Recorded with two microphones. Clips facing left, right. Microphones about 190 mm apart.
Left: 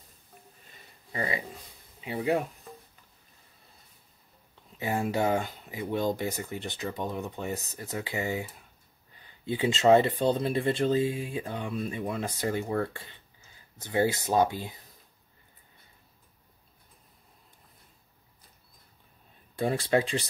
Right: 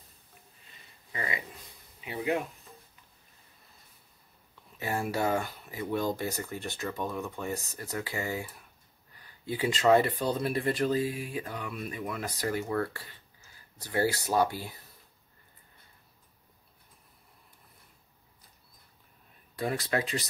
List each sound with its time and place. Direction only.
1.1 s speech: 35° left (ahead or behind)
4.7 s speech: 20° left (ahead or behind)
19.5 s speech: 30° left (ahead or behind)